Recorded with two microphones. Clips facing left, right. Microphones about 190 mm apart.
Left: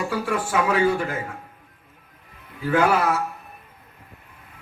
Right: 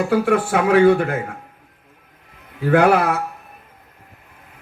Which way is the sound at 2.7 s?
60° right (ahead or behind).